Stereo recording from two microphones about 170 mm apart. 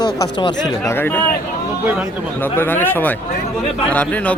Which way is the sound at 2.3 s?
10° left (ahead or behind).